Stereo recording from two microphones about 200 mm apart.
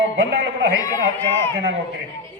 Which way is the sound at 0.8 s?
10° left (ahead or behind).